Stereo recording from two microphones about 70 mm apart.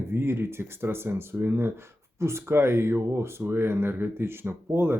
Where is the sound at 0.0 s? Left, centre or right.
Right.